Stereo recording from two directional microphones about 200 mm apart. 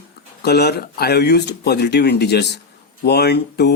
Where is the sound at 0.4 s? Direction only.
55° left (ahead or behind).